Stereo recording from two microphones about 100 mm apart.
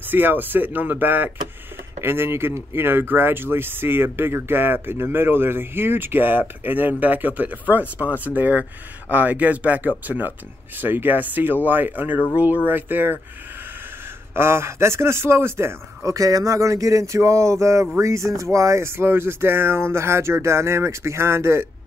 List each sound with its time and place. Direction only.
0.1 s speech: 20° right (ahead or behind)
14.3 s speech: 25° right (ahead or behind)